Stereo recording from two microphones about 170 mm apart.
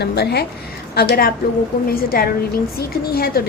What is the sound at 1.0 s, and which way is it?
A woman's voice, 60° left (ahead or behind).